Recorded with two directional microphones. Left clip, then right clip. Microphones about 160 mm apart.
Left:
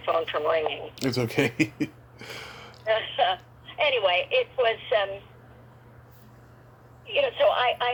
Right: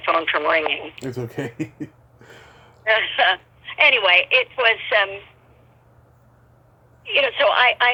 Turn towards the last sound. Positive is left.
turn(degrees=-35)  # may be behind; listen again after turning